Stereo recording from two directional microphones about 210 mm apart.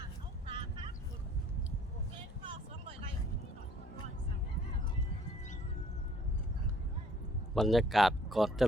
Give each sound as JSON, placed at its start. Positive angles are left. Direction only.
{"t": 0.4, "sound": "vehicle", "side_deg": -25}
{"t": 7.5, "sound": "speech", "side_deg": 0}